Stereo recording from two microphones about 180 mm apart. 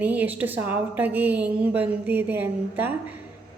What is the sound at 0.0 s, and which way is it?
A woman's voice, 10° right (ahead or behind).